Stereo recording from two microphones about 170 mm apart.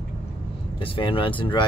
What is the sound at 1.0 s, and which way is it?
Speech, 30° left (ahead or behind).